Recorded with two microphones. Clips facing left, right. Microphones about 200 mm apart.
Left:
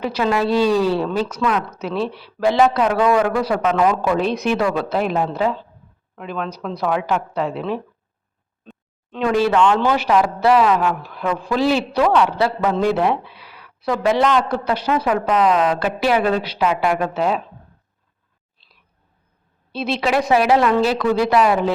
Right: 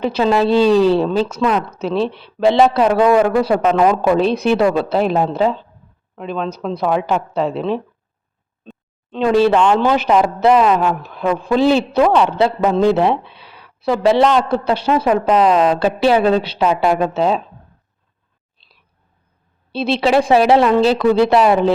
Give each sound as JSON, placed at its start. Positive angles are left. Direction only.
{"t": 0.0, "sound": "speech", "side_deg": -25}
{"t": 9.1, "sound": "speech", "side_deg": -30}
{"t": 19.7, "sound": "speech", "side_deg": -30}